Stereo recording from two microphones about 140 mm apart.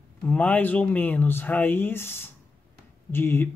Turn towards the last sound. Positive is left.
turn(degrees=15)  # may be behind; listen again after turning